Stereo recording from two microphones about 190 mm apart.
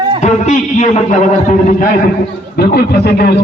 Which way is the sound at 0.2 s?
40° left (ahead or behind).